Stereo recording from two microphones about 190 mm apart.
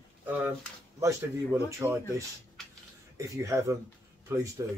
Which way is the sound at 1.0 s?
15° right (ahead or behind).